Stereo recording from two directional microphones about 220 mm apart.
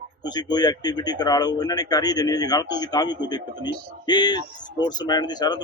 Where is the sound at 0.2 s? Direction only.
20° left (ahead or behind).